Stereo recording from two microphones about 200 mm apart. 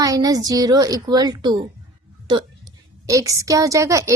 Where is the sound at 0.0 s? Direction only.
15° right (ahead or behind).